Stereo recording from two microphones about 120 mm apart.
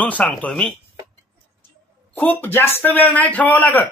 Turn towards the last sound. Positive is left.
turn(degrees=15)  # may be behind; listen again after turning